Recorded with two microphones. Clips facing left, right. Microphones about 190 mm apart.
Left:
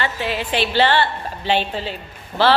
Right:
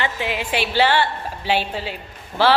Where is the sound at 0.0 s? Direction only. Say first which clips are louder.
Left 1 dB; 15° right (ahead or behind).